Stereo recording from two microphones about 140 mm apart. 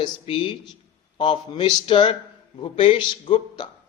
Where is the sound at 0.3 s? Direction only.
35° left (ahead or behind).